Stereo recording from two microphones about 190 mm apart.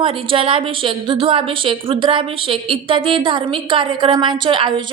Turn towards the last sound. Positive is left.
turn(degrees=-25)  # may be behind; listen again after turning